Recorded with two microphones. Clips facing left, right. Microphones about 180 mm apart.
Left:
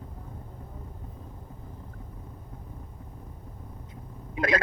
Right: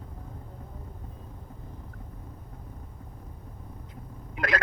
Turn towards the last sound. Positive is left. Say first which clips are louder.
# left 3 dB
turn(degrees=20)  # may be behind; listen again after turning